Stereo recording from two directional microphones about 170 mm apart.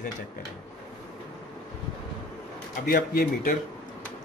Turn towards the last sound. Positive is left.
turn(degrees=55)  # may be behind; listen again after turning